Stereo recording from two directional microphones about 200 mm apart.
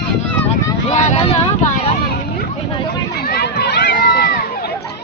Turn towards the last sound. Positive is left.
turn(degrees=50)  # may be behind; listen again after turning